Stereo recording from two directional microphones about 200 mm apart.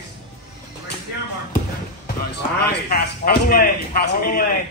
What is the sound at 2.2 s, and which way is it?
A man's voice, 50° left (ahead or behind).